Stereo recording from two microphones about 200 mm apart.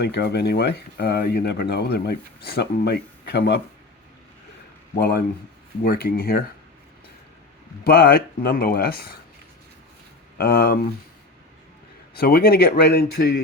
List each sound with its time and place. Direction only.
0.0 s speech: 55° left (ahead or behind)
4.9 s speech: 50° left (ahead or behind)
7.9 s speech: 50° left (ahead or behind)
10.3 s speech: 50° left (ahead or behind)
12.1 s speech: 50° left (ahead or behind)